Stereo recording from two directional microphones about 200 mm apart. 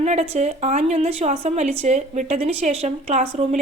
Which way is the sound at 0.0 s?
35° right (ahead or behind).